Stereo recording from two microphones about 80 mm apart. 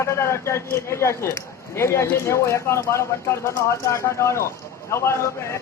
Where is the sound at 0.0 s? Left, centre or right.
Left.